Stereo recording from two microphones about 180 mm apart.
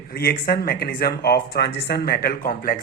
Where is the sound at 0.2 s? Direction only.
55° left (ahead or behind).